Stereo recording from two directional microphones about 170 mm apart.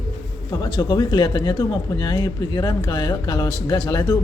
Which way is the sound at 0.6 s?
25° left (ahead or behind).